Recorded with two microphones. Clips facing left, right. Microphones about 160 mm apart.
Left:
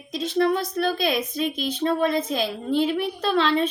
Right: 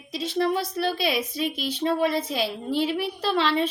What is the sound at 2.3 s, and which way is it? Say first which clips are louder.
A woman's voice: left 3 dB; 50° left (ahead or behind).